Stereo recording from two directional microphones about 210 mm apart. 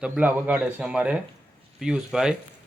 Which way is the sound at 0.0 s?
5° right (ahead or behind).